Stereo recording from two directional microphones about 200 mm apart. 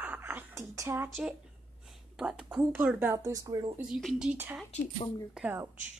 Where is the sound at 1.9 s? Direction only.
5° right (ahead or behind); by 3.8 s 20° right (ahead or behind).